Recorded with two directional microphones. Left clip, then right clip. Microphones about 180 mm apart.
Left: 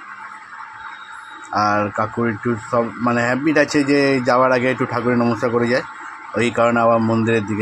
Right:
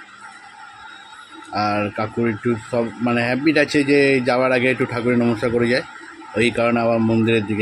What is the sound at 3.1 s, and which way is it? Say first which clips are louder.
Speech: even; 20° right (ahead or behind).